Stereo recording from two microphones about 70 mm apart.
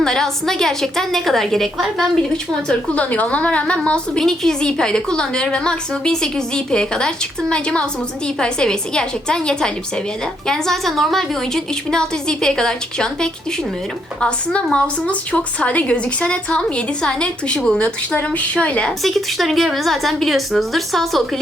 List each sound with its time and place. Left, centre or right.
0.0 s a woman's voice: centre
2.6 s a woman's voice: centre
19.0 s a woman's voice: centre